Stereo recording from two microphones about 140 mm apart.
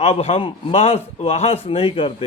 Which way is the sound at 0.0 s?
45° left (ahead or behind).